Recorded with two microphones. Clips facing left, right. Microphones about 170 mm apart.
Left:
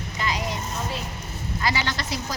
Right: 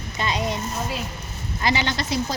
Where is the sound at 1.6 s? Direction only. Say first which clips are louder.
Right 4 dB; 20° right (ahead or behind).